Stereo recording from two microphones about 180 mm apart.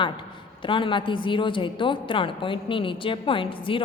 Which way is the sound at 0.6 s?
30° left (ahead or behind).